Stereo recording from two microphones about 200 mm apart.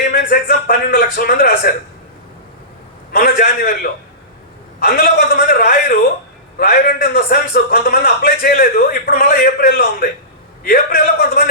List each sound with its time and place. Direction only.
0.1 s a man's voice: 45° left (ahead or behind)
3.1 s a man's voice: 45° left (ahead or behind)
4.8 s a man's voice: 45° left (ahead or behind)